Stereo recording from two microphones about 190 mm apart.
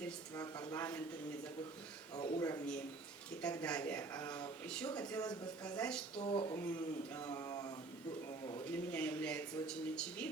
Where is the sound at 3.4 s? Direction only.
5° left (ahead or behind).